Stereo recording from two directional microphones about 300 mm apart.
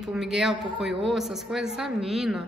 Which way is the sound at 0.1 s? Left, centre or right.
Centre.